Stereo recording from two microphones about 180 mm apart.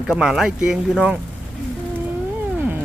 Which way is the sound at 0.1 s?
Centre (ahead or behind).